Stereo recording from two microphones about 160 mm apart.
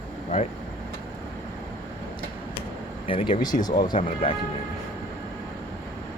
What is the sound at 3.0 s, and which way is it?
Speech, 30° left (ahead or behind).